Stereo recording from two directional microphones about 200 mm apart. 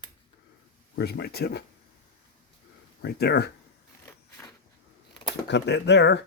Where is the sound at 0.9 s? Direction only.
55° left (ahead or behind).